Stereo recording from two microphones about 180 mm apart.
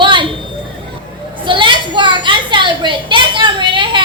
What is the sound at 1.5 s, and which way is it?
A child's voice, 25° right (ahead or behind).